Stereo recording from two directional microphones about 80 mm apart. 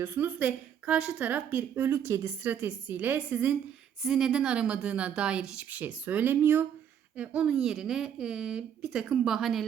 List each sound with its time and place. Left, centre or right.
0.0 s a woman's voice: right
4.0 s a woman's voice: centre; by 6.7 s right
7.2 s speech: centre